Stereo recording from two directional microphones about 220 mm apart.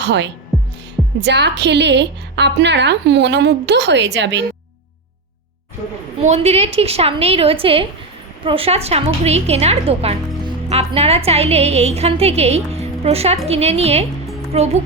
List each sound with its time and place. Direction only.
0.0 s speech: 50° right (ahead or behind)
0.5 s music: 5° right (ahead or behind)
1.2 s a woman's voice: 50° right (ahead or behind)
6.2 s a woman's voice: 30° right (ahead or behind)